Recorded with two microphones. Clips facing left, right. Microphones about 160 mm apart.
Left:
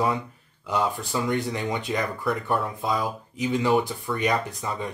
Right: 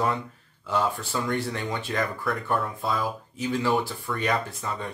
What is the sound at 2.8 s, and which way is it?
Speech, 15° left (ahead or behind).